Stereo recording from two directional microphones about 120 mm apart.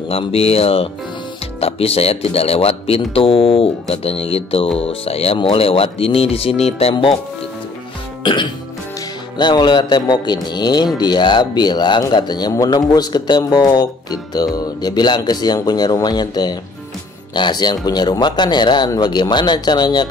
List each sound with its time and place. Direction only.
0.1 s speech: 55° left (ahead or behind)
8.2 s music: 40° left (ahead or behind)
9.4 s speech: 35° left (ahead or behind)